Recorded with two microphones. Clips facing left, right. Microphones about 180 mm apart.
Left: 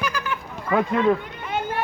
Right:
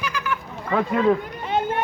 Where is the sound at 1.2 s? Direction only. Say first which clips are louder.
Right 4 dB; 35° right (ahead or behind).